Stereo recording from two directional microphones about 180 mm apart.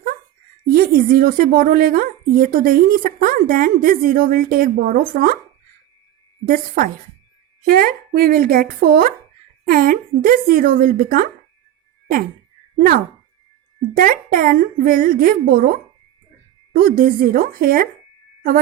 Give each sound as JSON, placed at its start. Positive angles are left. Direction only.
{"t": 0.6, "sound": "a woman's voice", "side_deg": -55}
{"t": 6.5, "sound": "a woman's voice", "side_deg": -50}
{"t": 12.7, "sound": "a woman's voice", "side_deg": -55}